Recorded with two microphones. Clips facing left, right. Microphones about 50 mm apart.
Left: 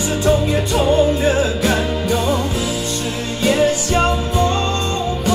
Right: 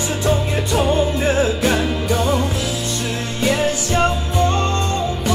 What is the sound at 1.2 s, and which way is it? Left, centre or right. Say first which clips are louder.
Music: left 1 dB; right.